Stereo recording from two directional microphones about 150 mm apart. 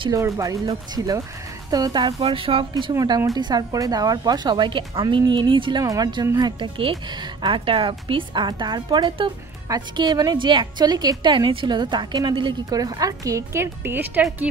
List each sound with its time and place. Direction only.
0.2 s speech: 20° right (ahead or behind)
2.9 s speech: 20° right (ahead or behind)